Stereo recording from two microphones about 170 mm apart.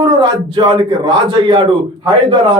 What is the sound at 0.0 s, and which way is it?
A man's voice, 25° right (ahead or behind).